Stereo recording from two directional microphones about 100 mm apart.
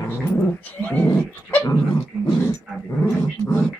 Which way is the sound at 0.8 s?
15° left (ahead or behind).